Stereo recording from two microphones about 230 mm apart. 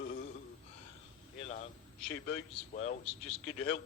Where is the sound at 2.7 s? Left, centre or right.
Left.